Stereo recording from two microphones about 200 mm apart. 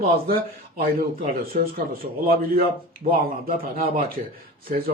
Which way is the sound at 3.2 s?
45° right (ahead or behind).